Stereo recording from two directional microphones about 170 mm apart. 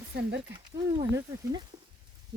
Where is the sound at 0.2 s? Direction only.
90° right.